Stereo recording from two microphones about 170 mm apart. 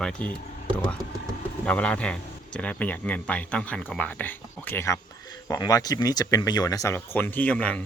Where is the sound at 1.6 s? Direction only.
5° left (ahead or behind).